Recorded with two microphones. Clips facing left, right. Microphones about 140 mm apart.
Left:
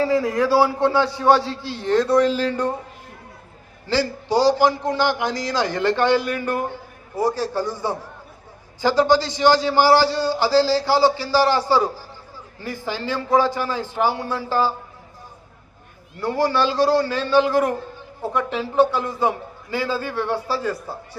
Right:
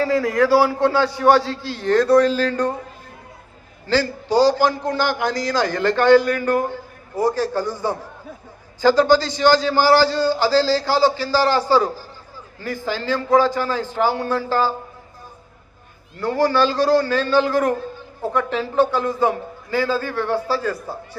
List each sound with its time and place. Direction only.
0.0 s a man's voice: 25° left (ahead or behind)
3.8 s a man's voice: 25° left (ahead or behind)
16.2 s a man's voice: 25° left (ahead or behind)